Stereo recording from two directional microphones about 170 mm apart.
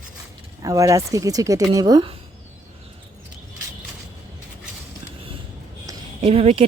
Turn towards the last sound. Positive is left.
turn(degrees=-35)  # may be behind; listen again after turning